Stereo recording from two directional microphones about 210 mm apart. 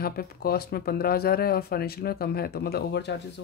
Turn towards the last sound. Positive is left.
turn(degrees=55)  # may be behind; listen again after turning